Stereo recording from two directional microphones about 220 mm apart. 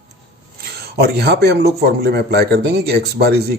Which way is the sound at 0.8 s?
45° right (ahead or behind).